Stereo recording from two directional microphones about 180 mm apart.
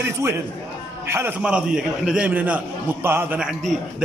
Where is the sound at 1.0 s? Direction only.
15° right (ahead or behind).